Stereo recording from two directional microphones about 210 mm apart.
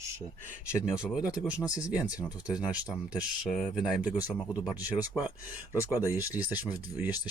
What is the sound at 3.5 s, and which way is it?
Speech, centre (ahead or behind).